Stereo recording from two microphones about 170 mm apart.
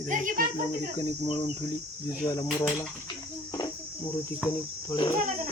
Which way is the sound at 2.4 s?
Centre (ahead or behind).